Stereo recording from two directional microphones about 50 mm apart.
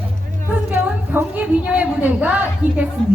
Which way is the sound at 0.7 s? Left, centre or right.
Right.